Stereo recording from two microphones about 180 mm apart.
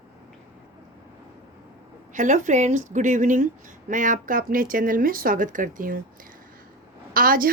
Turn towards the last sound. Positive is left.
turn(degrees=-50)  # may be behind; listen again after turning